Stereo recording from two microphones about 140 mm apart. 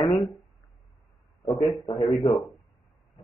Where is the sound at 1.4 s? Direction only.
Centre (ahead or behind).